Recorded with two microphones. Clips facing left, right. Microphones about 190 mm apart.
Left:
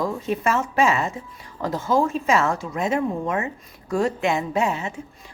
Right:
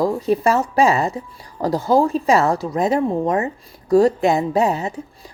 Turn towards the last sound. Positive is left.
turn(degrees=-35)  # may be behind; listen again after turning